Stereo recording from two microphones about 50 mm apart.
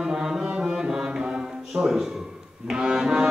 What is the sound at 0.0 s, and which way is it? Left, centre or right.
Music, centre.